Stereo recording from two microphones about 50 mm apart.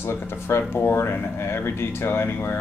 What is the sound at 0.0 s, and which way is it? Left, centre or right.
Speech, left.